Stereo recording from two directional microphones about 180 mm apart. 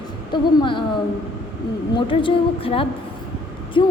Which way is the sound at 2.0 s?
30° left (ahead or behind).